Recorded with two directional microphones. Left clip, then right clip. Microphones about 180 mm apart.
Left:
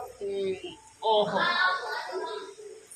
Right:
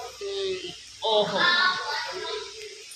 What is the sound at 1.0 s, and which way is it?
Speech, 10° left (ahead or behind).